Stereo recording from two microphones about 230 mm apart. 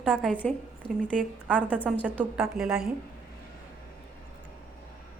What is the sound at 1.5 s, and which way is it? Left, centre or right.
A woman's voice, centre.